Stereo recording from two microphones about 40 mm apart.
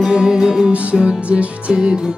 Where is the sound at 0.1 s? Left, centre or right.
Centre.